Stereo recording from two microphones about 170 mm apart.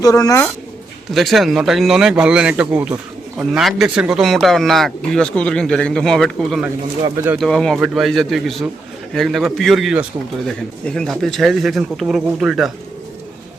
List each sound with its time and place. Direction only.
0.0 s speech: 20° left (ahead or behind)
1.1 s speech: centre (ahead or behind)